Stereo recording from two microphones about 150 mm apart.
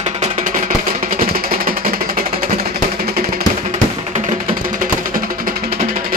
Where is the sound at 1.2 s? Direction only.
75° right (ahead or behind).